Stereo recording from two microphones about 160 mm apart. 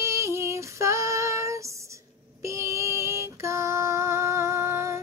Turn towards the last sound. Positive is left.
turn(degrees=-15)  # may be behind; listen again after turning